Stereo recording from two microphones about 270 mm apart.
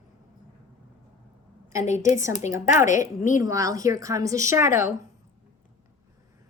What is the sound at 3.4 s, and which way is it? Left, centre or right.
A woman's voice, centre.